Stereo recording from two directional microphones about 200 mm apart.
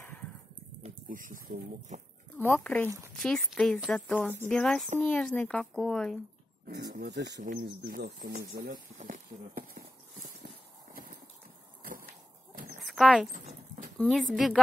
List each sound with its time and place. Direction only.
0.8 s speech: 40° right (ahead or behind)
2.3 s speech: 10° left (ahead or behind)
6.7 s speech: 55° right (ahead or behind)
7.4 s speech: 45° right (ahead or behind)
8.9 s clip-clop: 40° right (ahead or behind)
10.4 s a sound: 45° right (ahead or behind)
12.7 s horse: centre (ahead or behind)
13.3 s horse: 35° right (ahead or behind)
13.9 s speech: centre (ahead or behind)